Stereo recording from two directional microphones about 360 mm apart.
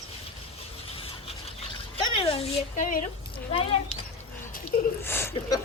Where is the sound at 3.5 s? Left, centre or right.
Centre.